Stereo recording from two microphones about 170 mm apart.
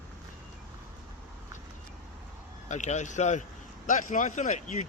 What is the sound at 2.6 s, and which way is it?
A man's voice, 45° left (ahead or behind).